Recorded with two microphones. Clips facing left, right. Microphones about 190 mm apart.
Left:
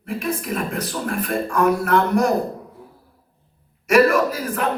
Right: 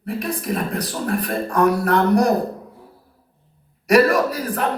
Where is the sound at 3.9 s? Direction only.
35° right (ahead or behind).